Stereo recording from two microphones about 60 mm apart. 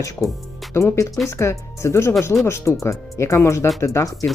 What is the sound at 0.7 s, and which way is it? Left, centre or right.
Speech, left.